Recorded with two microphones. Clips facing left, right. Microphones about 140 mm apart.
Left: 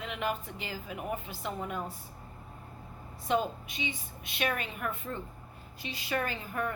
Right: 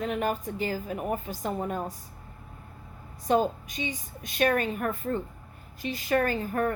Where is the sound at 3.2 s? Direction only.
40° right (ahead or behind).